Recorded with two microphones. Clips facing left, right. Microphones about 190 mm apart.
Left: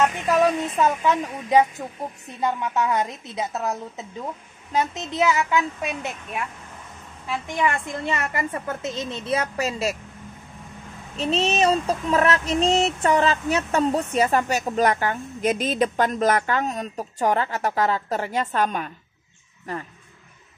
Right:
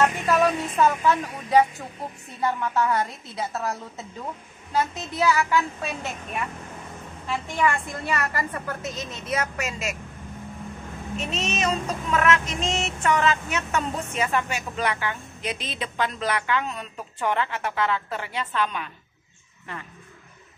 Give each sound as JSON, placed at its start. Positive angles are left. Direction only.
{"t": 0.3, "sound": "a woman's voice", "side_deg": 20}
{"t": 4.7, "sound": "a woman's voice", "side_deg": 20}
{"t": 7.2, "sound": "a woman's voice", "side_deg": 15}
{"t": 11.1, "sound": "a sound", "side_deg": 30}